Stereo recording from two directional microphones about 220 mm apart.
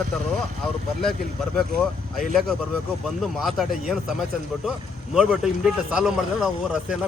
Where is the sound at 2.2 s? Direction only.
Centre (ahead or behind).